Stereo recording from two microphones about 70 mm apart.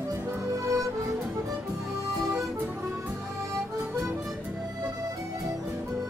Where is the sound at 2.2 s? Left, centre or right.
Centre.